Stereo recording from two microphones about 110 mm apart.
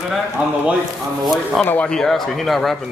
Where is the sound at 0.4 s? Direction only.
15° right (ahead or behind).